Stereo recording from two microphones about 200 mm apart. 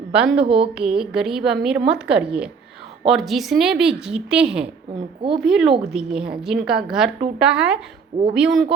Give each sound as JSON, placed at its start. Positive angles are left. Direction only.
{"t": 0.1, "sound": "a woman's voice", "side_deg": -5}
{"t": 0.4, "sound": "a woman's voice", "side_deg": -30}
{"t": 0.7, "sound": "a woman's voice", "side_deg": -5}
{"t": 4.9, "sound": "a woman's voice", "side_deg": -25}
{"t": 5.4, "sound": "a woman's voice", "side_deg": 0}